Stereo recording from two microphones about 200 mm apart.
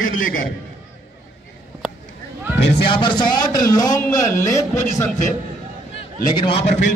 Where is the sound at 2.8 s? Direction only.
25° left (ahead or behind).